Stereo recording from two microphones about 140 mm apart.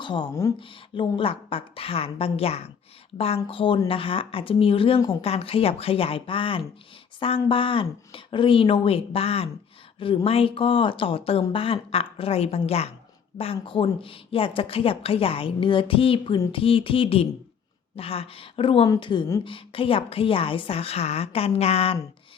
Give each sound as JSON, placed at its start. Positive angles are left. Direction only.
{"t": 0.0, "sound": "a woman's voice", "side_deg": 35}